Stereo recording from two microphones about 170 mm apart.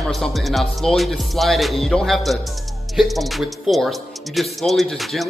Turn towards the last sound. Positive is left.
turn(degrees=0)  # may be behind; listen again after turning